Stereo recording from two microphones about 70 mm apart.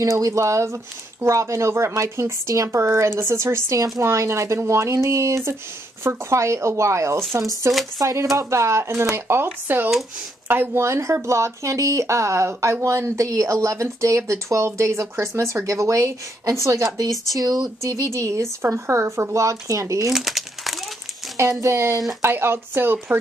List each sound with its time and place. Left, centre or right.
0.0 s speech: right
17.3 s speech: right
20.1 s crumpling: centre
21.4 s speech: right